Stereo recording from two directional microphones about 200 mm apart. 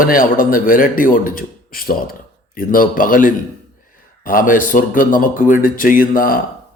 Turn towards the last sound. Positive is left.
turn(degrees=45)  # may be behind; listen again after turning